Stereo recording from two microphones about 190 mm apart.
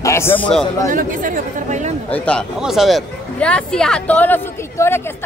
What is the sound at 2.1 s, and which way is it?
A woman's voice, 5° left (ahead or behind).